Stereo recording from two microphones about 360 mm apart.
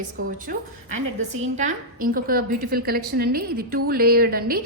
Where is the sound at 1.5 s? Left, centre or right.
Right.